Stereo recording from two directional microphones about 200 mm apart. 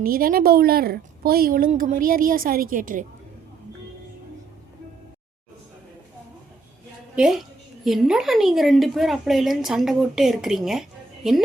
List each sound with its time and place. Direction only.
0.0 s a woman's voice: 45° right (ahead or behind)
7.2 s a woman's voice: centre (ahead or behind)